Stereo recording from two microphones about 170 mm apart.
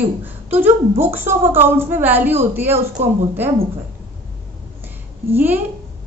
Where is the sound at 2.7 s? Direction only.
40° right (ahead or behind).